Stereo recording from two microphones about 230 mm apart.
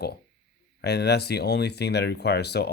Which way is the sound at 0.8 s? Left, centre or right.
Left.